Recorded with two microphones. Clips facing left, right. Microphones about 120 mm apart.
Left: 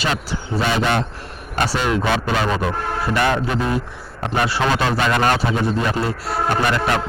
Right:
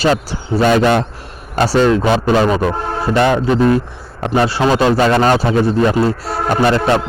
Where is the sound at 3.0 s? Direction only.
25° right (ahead or behind).